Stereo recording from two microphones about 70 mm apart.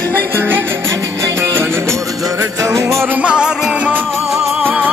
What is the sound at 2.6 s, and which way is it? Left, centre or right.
Music, right.